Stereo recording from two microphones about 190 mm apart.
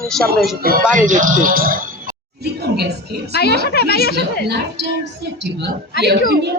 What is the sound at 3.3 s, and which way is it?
Speech, 55° left (ahead or behind).